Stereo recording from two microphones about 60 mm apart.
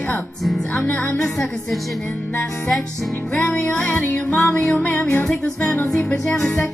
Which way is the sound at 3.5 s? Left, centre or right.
Left.